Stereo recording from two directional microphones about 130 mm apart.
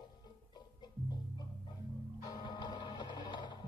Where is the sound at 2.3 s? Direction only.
30° left (ahead or behind).